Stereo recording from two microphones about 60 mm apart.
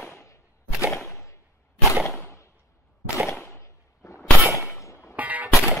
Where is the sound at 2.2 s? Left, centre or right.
Left.